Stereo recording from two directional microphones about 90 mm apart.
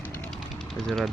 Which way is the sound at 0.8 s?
5° left (ahead or behind).